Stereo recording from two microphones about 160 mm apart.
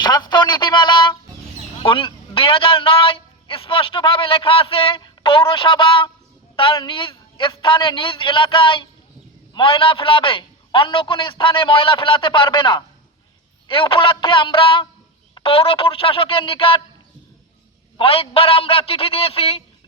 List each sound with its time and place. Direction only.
0.0 s a man's voice: 25° left (ahead or behind)
17.9 s a man's voice: 35° left (ahead or behind)